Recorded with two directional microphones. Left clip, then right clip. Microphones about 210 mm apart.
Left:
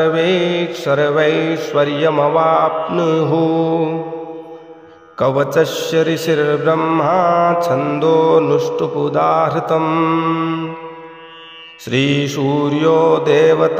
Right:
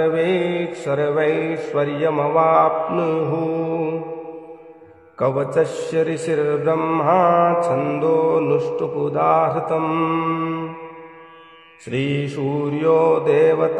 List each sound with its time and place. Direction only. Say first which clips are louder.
0.0 s mantra: left 4 dB; 15° left (ahead or behind)
5.2 s mantra: left 5 dB; 20° left (ahead or behind)
11.9 s mantra: left 7 dB; 25° left (ahead or behind)